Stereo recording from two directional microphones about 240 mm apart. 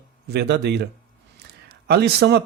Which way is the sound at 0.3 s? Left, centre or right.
Right.